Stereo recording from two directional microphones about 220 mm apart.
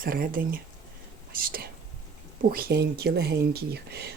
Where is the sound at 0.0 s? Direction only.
40° right (ahead or behind).